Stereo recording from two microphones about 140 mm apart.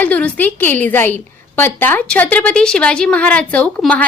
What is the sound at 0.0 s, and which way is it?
A woman's voice, 10° left (ahead or behind).